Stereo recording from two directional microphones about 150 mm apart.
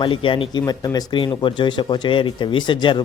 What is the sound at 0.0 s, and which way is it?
Speech, 35° left (ahead or behind).